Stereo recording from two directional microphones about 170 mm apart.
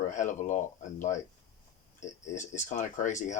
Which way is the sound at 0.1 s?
45° left (ahead or behind).